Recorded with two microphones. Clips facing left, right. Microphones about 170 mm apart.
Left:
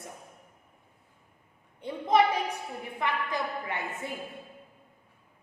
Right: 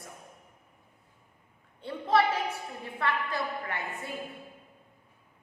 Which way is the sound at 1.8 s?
15° left (ahead or behind).